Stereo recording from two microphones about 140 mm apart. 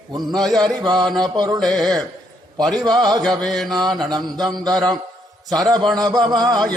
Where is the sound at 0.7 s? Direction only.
30° right (ahead or behind).